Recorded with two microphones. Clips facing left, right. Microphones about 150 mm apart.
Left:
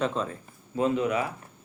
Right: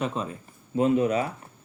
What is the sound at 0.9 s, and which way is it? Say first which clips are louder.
Speech: right 3 dB; 30° right (ahead or behind).